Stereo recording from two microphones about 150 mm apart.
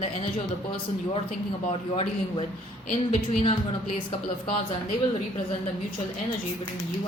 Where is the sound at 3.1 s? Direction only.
55° left (ahead or behind).